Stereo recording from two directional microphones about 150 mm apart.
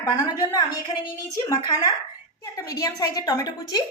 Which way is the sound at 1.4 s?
25° left (ahead or behind).